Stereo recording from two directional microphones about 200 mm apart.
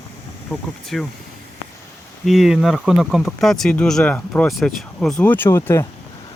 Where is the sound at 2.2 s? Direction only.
Centre (ahead or behind).